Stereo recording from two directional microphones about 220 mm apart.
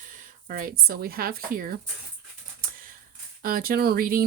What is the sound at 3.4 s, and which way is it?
Speech, 40° right (ahead or behind).